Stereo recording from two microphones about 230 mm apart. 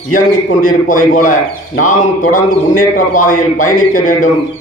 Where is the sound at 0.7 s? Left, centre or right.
Left.